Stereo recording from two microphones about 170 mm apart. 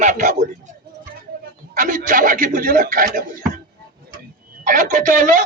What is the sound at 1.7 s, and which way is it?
A man's voice, 50° right (ahead or behind).